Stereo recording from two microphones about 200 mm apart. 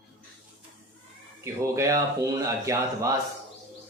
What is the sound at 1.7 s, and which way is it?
Speech, 15° right (ahead or behind).